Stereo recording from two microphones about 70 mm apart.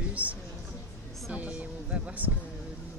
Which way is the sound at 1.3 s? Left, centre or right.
Centre.